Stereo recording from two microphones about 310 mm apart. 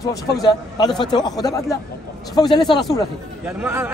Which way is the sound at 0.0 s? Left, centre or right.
Centre.